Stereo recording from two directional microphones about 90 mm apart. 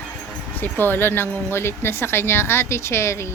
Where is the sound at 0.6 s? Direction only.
25° left (ahead or behind).